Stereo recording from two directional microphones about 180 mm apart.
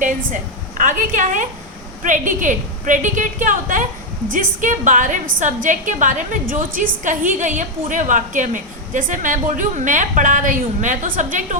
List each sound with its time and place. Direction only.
0.8 s a woman's voice: 45° right (ahead or behind)